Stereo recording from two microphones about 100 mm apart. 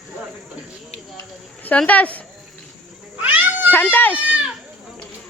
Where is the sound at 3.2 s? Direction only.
15° right (ahead or behind).